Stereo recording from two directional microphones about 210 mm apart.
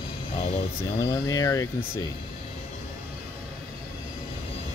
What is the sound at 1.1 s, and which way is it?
Speech, 15° left (ahead or behind).